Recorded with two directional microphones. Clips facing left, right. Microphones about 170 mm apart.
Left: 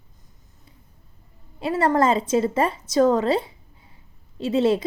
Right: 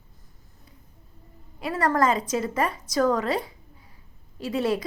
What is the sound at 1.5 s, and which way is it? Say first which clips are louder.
A woman's voice: left 3 dB; 25° left (ahead or behind).